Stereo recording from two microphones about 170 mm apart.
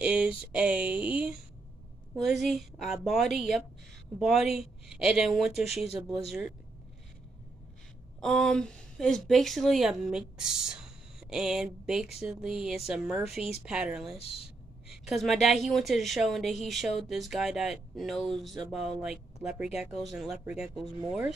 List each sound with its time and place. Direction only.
0.0 s a woman's voice: 5° right (ahead or behind)
8.2 s a woman's voice: 5° left (ahead or behind)
14.1 s speech: 35° left (ahead or behind)
14.9 s a woman's voice: centre (ahead or behind)